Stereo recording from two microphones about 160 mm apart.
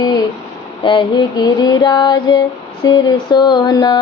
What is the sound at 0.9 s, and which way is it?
Speech, 30° left (ahead or behind).